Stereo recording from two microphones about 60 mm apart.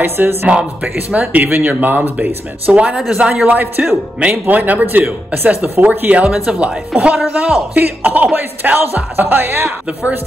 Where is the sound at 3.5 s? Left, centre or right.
Right; by 6.7 s centre.